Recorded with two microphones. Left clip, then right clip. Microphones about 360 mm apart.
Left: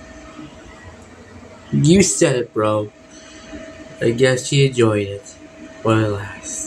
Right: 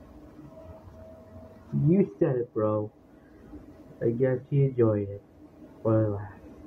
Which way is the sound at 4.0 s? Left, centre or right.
Right.